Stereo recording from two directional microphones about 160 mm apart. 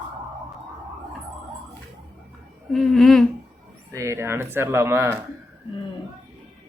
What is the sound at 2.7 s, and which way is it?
Speech, centre (ahead or behind).